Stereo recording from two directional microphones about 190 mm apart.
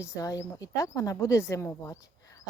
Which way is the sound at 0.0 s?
15° left (ahead or behind).